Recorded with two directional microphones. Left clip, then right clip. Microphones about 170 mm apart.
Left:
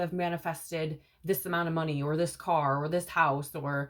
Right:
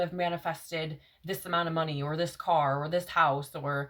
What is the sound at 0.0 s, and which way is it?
Speech, 40° right (ahead or behind).